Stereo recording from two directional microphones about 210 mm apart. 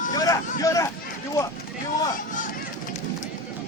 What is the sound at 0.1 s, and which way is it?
Vehicle, 15° left (ahead or behind).